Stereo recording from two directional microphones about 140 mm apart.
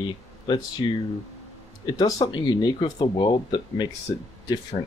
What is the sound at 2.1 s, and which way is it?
Speech, 35° left (ahead or behind).